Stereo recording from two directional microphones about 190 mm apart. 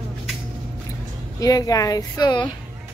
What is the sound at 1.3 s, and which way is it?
Speech, 20° left (ahead or behind).